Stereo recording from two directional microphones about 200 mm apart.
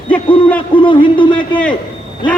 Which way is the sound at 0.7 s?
25° left (ahead or behind).